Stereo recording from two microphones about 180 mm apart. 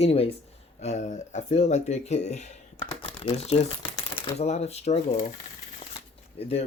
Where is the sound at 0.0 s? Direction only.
35° left (ahead or behind).